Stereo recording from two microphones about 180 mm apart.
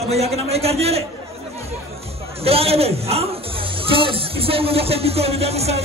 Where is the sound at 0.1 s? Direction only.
35° right (ahead or behind).